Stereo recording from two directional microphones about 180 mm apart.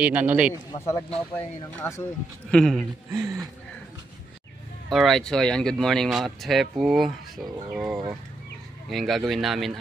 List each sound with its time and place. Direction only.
0.0 s a man's voice: 10° right (ahead or behind)
1.3 s speech: 15° left (ahead or behind)
2.5 s speech: centre (ahead or behind)
3.1 s speech: 20° right (ahead or behind)
4.8 s speech: centre (ahead or behind)